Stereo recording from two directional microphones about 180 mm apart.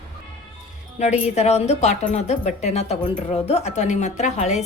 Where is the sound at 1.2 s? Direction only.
35° left (ahead or behind).